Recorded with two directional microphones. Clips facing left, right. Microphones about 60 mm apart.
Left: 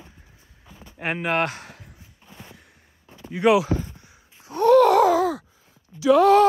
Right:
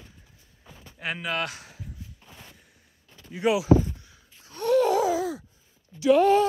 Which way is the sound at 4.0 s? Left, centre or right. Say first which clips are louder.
Left 3 dB; left.